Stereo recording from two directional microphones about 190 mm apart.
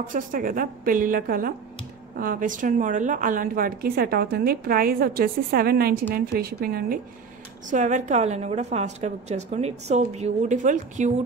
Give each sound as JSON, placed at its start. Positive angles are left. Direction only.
{"t": 0.1, "sound": "a woman's voice", "side_deg": -45}
{"t": 7.7, "sound": "a woman's voice", "side_deg": -40}